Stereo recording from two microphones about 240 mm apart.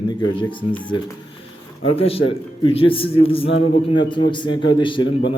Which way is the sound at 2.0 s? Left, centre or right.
Left.